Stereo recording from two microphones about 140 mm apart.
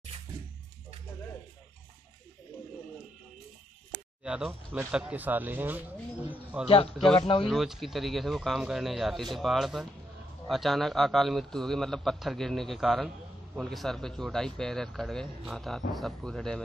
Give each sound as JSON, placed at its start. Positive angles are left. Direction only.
{"t": 4.2, "sound": "a sound", "side_deg": -5}
{"t": 4.5, "sound": "speech", "side_deg": -10}
{"t": 7.2, "sound": "speech", "side_deg": 35}
{"t": 7.4, "sound": "speech", "side_deg": 0}